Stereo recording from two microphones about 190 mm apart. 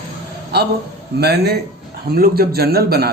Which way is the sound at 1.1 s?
60° right (ahead or behind).